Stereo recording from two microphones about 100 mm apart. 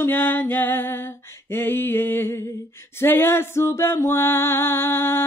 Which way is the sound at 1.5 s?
20° left (ahead or behind).